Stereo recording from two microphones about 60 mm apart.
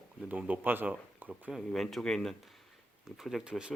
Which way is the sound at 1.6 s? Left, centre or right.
Centre.